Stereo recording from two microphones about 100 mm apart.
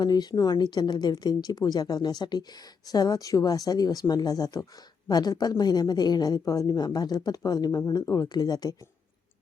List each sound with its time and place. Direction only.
0.0 s speech: 45° left (ahead or behind)